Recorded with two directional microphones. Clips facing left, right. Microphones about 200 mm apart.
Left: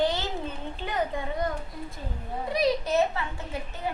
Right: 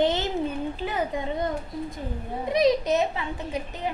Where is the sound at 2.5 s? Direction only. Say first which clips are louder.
Right 3 dB; 20° right (ahead or behind).